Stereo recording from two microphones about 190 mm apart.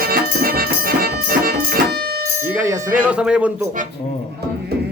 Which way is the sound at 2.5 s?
10° right (ahead or behind).